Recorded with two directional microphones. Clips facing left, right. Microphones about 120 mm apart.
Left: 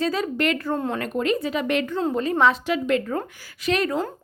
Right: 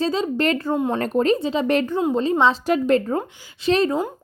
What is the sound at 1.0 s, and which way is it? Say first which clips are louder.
Speech: right 4 dB; 35° right (ahead or behind).